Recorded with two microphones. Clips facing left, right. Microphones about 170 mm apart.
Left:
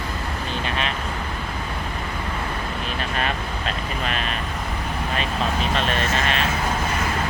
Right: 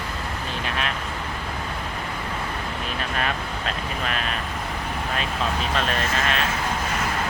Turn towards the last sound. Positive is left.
turn(degrees=0)  # may be behind; listen again after turning